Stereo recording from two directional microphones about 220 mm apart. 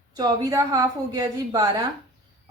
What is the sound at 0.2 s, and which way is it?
A woman's voice, 15° right (ahead or behind).